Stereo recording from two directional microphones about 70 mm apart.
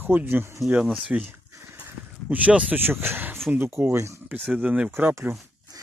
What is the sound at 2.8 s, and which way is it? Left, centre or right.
Speech, right.